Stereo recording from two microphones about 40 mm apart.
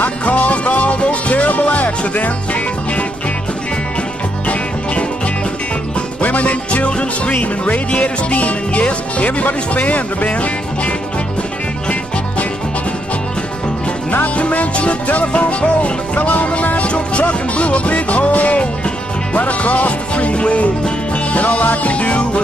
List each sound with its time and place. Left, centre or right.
0.0 s music: left
4.5 s music: left
14.3 s music: left